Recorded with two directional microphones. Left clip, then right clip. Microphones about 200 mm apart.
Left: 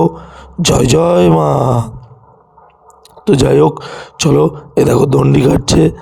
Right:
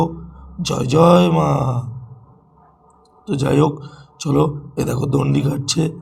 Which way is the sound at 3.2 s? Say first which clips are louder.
Left 9 dB; 45° left (ahead or behind).